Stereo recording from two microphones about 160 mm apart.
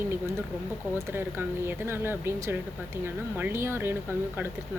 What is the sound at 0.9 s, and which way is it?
Speech, 15° right (ahead or behind).